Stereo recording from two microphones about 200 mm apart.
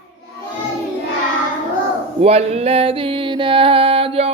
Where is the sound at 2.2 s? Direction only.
30° right (ahead or behind).